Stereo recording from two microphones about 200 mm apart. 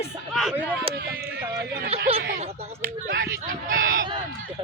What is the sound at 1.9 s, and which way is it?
Speech, 30° right (ahead or behind).